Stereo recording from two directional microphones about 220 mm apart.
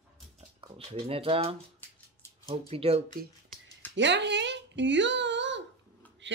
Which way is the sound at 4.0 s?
55° right (ahead or behind).